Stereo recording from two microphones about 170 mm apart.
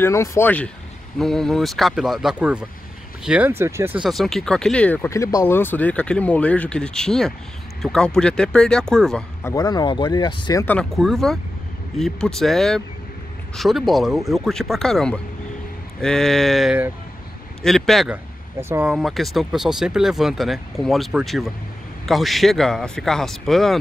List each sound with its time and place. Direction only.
0.0 s speech: 15° left (ahead or behind); by 4.1 s 10° right (ahead or behind)
4.1 s speech: centre (ahead or behind)
9.4 s speech: 20° left (ahead or behind)
10.6 s speech: 5° left (ahead or behind)
18.1 s a sound: 10° right (ahead or behind)
18.9 s speech: centre (ahead or behind)